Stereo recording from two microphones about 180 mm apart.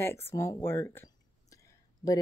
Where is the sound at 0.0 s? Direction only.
15° left (ahead or behind).